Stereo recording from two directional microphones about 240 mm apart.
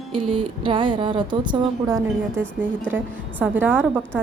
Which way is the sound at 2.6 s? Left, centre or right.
Centre.